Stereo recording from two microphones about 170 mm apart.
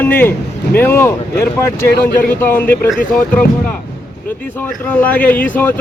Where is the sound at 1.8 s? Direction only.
60° left (ahead or behind).